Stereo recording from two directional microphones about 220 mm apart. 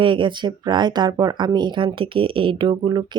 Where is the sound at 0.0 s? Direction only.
20° right (ahead or behind).